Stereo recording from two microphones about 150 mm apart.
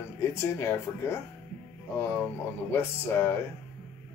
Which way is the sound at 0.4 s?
15° left (ahead or behind).